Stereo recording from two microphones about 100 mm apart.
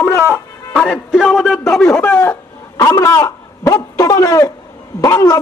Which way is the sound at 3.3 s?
35° left (ahead or behind).